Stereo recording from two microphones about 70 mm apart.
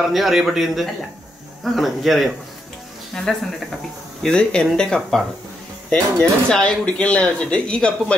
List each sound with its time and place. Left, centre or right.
0.1 s speech: centre